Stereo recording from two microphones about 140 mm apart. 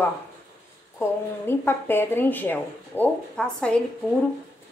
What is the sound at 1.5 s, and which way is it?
Speech, 15° left (ahead or behind).